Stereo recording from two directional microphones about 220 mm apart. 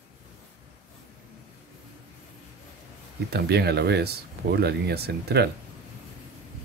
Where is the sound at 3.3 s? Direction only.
50° right (ahead or behind).